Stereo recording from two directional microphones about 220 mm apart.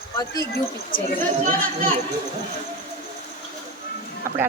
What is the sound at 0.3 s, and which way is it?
Speech, 45° left (ahead or behind).